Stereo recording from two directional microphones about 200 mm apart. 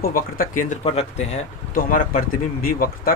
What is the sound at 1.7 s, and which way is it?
Speech, 45° left (ahead or behind).